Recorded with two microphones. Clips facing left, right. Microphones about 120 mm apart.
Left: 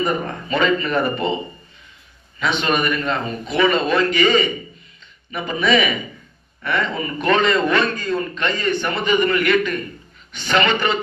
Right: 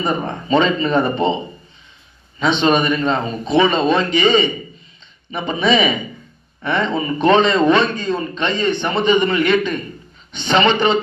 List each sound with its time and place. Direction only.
0.0 s a man's voice: 25° right (ahead or behind)
2.4 s a man's voice: 25° right (ahead or behind)